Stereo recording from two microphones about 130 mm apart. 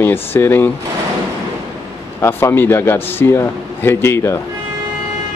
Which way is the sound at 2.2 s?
20° left (ahead or behind).